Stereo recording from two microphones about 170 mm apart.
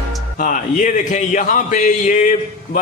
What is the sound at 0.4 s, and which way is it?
A man's voice, 50° left (ahead or behind).